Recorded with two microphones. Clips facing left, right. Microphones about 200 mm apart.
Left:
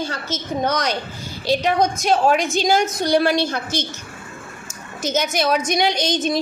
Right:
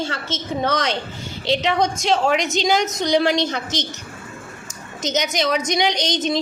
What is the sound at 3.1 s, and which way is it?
Speech, 20° right (ahead or behind).